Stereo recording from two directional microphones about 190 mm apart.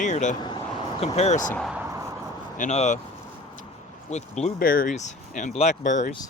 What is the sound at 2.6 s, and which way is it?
Speech, 35° left (ahead or behind).